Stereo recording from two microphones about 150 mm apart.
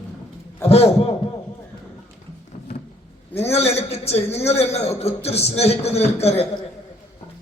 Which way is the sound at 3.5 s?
45° left (ahead or behind).